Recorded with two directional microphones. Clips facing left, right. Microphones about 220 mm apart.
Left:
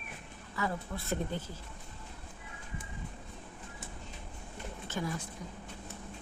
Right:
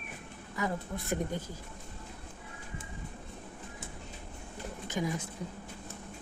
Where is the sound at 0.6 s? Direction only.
15° right (ahead or behind).